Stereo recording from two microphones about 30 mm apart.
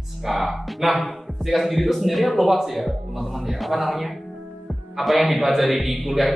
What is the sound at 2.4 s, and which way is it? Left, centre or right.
Speech, centre.